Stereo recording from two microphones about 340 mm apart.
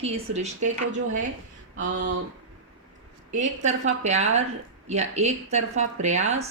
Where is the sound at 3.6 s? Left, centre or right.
Right.